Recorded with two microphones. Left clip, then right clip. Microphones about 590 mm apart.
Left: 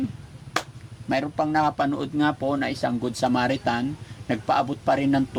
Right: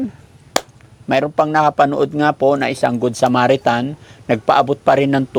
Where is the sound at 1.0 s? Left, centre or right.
Right.